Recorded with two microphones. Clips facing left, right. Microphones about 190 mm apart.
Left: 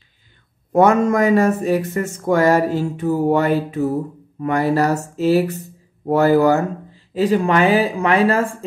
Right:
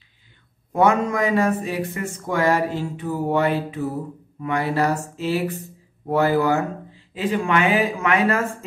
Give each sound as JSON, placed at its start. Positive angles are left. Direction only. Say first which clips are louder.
{"t": 0.7, "sound": "speech", "louder": "left 5 dB", "side_deg": 45}